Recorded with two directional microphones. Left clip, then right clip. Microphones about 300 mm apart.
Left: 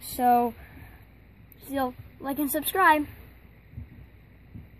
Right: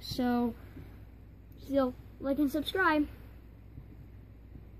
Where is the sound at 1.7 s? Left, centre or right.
Left.